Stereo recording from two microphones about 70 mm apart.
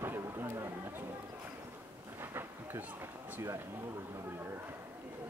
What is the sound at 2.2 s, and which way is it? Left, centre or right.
Thunder, right.